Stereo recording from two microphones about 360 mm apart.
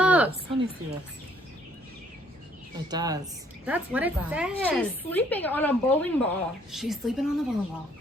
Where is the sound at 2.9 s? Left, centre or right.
Centre.